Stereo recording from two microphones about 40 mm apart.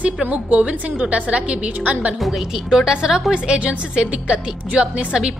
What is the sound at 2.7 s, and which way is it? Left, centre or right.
A woman's voice, centre.